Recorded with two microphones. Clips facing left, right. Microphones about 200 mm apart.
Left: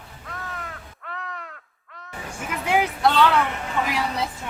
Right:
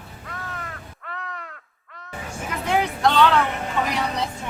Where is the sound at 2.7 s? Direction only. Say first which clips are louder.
Even; 5° left (ahead or behind).